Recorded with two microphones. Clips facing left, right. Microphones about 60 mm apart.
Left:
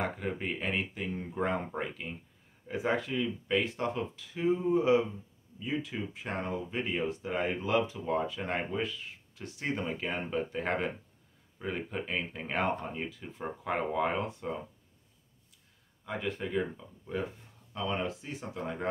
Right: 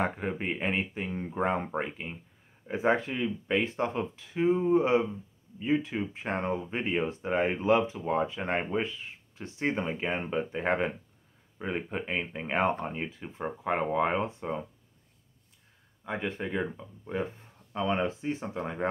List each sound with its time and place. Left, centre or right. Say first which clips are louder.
0.0 s speech: right 3 dB; right
16.1 s speech: right 2 dB; right